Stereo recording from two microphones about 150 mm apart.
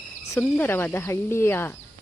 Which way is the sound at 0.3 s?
15° left (ahead or behind).